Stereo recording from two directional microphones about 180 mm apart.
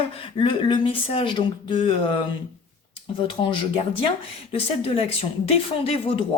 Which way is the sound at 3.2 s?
30° left (ahead or behind).